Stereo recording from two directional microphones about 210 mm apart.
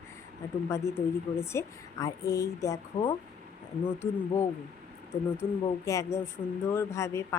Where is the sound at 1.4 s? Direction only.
10° left (ahead or behind).